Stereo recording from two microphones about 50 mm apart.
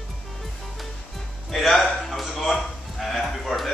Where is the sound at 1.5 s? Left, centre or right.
Centre.